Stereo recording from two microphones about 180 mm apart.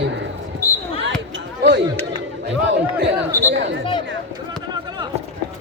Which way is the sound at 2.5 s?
90° right.